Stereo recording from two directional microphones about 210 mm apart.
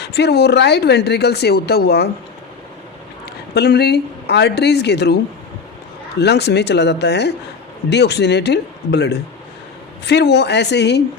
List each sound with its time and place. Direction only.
0.0 s speech: 50° left (ahead or behind)
3.5 s speech: 50° left (ahead or behind)
6.1 s speech: 50° left (ahead or behind)